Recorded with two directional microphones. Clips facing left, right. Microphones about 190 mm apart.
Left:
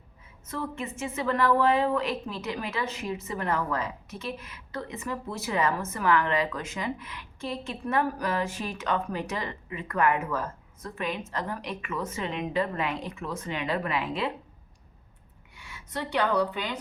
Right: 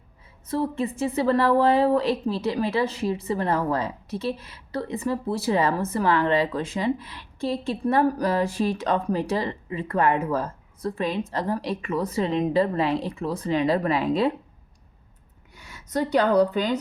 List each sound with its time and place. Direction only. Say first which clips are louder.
0.4 s a woman's voice: right 8 dB; 35° right (ahead or behind)
15.5 s speech: right 9 dB; 40° right (ahead or behind)